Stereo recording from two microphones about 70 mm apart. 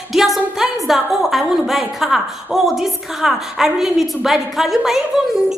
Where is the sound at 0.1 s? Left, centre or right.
Centre.